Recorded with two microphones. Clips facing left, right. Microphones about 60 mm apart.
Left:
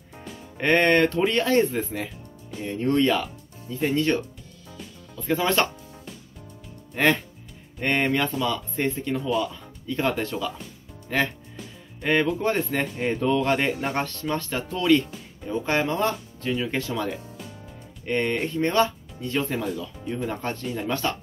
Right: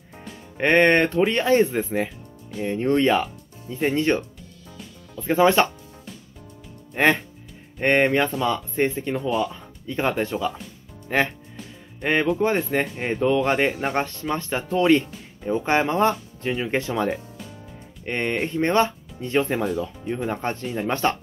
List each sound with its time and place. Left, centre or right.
0.6 s speech: right
5.2 s speech: right
7.0 s speech: right
8.8 s speech: centre
19.6 s speech: right
20.2 s speech: right